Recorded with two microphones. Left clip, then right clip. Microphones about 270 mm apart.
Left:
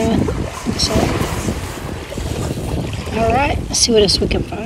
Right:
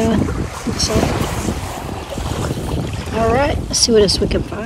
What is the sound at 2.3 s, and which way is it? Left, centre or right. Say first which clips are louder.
Boat: right 1 dB; centre.